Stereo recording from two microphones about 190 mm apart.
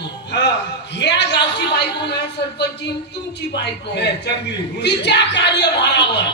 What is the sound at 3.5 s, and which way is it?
Speech, 65° left (ahead or behind).